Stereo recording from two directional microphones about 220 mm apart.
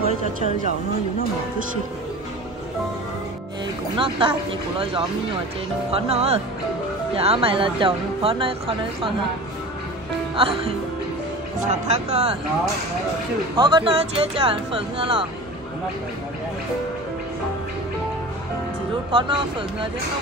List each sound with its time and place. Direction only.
4.0 s a woman's voice: 25° right (ahead or behind)
10.3 s a woman's voice: 25° right (ahead or behind)
13.6 s a woman's voice: 20° right (ahead or behind)
19.1 s a woman's voice: 20° right (ahead or behind)